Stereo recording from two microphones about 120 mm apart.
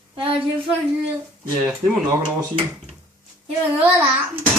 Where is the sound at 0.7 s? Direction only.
5° right (ahead or behind).